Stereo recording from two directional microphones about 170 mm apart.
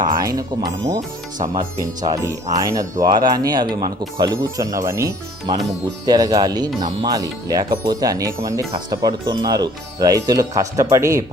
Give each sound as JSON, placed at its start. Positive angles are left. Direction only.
{"t": 0.0, "sound": "speech", "side_deg": -20}